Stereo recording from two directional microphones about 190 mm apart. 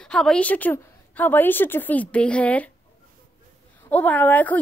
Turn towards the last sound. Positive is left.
turn(degrees=10)  # may be behind; listen again after turning